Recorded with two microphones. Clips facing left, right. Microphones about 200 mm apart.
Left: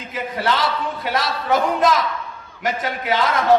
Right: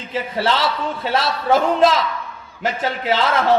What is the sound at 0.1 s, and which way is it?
A man's voice, 30° right (ahead or behind).